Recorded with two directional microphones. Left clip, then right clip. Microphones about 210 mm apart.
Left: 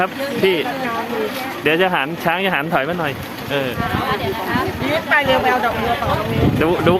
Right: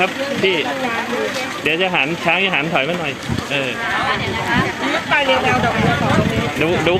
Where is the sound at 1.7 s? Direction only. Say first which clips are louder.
Left 1 dB; 20° left (ahead or behind).